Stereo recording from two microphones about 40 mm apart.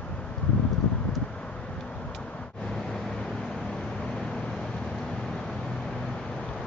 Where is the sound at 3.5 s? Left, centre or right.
Centre.